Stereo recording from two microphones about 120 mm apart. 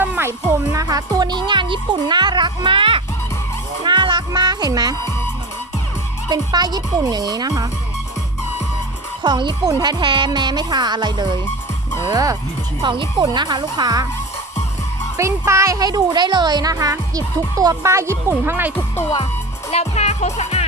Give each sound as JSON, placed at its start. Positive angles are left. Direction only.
{"t": 0.0, "sound": "music", "side_deg": -15}
{"t": 0.5, "sound": "speech", "side_deg": -30}
{"t": 3.8, "sound": "music", "side_deg": -40}
{"t": 6.2, "sound": "speech", "side_deg": -35}
{"t": 9.2, "sound": "speech", "side_deg": -40}
{"t": 12.8, "sound": "speech", "side_deg": -45}
{"t": 15.2, "sound": "a child's voice", "side_deg": -25}
{"t": 19.7, "sound": "music", "side_deg": 65}